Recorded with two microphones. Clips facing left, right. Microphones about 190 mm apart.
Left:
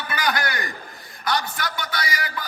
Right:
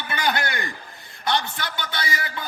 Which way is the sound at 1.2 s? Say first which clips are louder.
Even; 25° right (ahead or behind).